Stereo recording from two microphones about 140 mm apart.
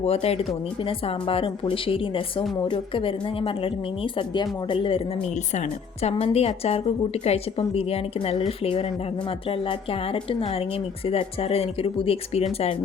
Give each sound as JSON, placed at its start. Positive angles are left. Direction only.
{"t": 0.0, "sound": "a woman's voice", "side_deg": 45}
{"t": 5.5, "sound": "a woman's voice", "side_deg": 50}